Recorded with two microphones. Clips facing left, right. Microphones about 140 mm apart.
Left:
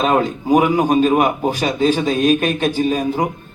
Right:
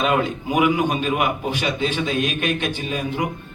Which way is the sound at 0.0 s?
40° left (ahead or behind).